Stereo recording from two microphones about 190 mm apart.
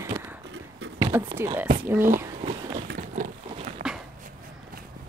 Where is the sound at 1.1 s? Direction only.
10° right (ahead or behind).